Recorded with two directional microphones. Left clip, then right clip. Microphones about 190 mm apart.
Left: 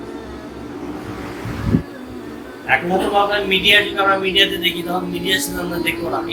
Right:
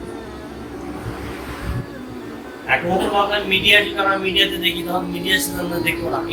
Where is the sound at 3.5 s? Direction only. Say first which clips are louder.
Left 1 dB; 20° left (ahead or behind).